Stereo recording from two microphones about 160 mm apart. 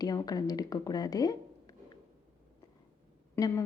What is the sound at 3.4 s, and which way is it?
Speech, 20° left (ahead or behind).